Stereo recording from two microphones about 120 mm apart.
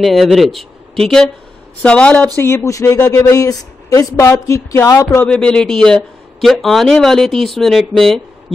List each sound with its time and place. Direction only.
0.0 s speech: centre (ahead or behind)
2.3 s speech: 20° left (ahead or behind)
5.2 s speech: 10° left (ahead or behind)